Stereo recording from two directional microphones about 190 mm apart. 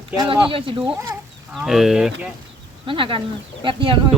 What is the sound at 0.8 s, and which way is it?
Speech, 5° right (ahead or behind).